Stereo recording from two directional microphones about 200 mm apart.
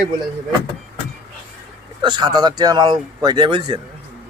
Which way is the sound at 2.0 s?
25° right (ahead or behind).